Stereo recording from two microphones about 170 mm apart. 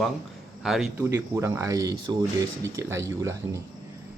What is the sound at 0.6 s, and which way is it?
Speech, centre (ahead or behind).